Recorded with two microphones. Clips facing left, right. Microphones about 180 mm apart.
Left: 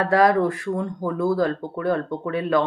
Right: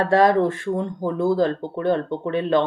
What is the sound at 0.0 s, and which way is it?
Speech, 25° right (ahead or behind).